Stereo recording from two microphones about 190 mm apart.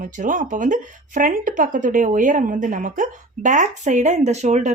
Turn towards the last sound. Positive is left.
turn(degrees=-40)  # may be behind; listen again after turning